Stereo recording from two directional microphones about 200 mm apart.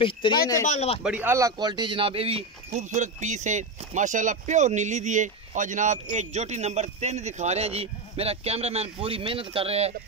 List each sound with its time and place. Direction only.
0.0 s a man's voice: 25° left (ahead or behind)
1.0 s speech: 10° right (ahead or behind); by 9.9 s 30° right (ahead or behind)